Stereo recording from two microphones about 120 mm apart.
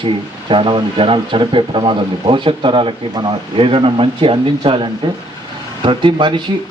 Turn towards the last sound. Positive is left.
turn(degrees=-40)  # may be behind; listen again after turning